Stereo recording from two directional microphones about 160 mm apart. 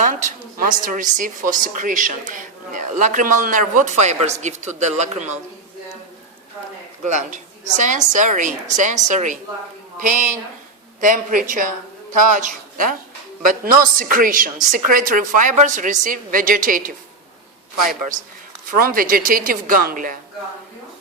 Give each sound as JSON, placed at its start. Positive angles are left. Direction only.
{"t": 0.0, "sound": "a woman's voice", "side_deg": -50}
{"t": 7.1, "sound": "a woman's voice", "side_deg": -50}
{"t": 14.0, "sound": "a woman's voice", "side_deg": -60}
{"t": 18.8, "sound": "a woman's voice", "side_deg": -60}